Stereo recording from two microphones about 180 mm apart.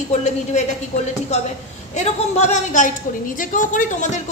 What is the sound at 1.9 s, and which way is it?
A woman's voice, 40° left (ahead or behind).